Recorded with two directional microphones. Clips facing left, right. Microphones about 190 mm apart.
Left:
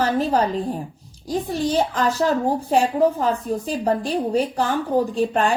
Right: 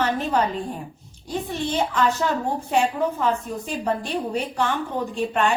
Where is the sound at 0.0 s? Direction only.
35° left (ahead or behind).